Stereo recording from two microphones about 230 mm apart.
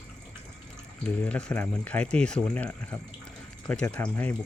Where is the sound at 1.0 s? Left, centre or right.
Centre.